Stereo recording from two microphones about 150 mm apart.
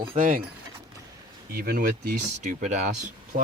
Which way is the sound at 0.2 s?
65° right (ahead or behind).